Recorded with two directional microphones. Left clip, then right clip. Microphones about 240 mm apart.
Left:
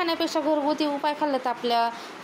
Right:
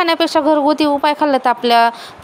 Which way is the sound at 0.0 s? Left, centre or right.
Right.